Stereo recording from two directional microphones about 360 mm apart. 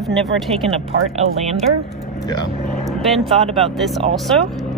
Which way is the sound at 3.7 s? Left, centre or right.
Centre.